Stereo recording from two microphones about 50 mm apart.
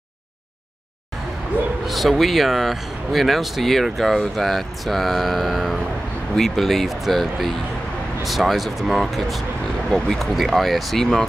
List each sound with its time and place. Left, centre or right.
1.9 s speech: centre
9.8 s speech: centre
10.3 s speech: centre